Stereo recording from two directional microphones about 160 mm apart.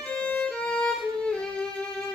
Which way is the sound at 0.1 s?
10° left (ahead or behind).